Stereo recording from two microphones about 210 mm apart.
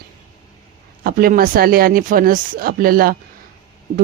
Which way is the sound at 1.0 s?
40° right (ahead or behind).